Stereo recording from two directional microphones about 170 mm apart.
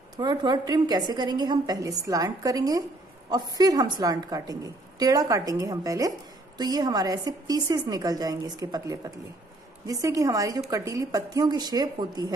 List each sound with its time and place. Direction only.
0.2 s a woman's voice: 25° right (ahead or behind)